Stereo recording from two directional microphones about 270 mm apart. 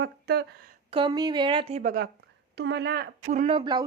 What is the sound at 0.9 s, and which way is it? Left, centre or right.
Speech, centre.